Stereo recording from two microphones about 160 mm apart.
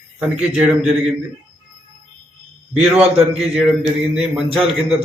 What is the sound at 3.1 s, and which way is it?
A man's voice, 5° right (ahead or behind).